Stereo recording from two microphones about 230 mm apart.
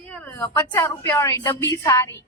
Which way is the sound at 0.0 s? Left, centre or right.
Centre.